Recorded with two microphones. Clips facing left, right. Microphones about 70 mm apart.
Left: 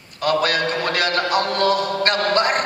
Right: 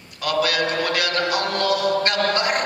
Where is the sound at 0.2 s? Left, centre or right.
Left.